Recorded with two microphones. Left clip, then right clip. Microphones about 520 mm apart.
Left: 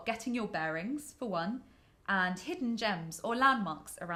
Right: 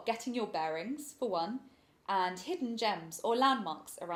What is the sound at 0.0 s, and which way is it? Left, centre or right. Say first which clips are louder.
Speech: right 1 dB; left.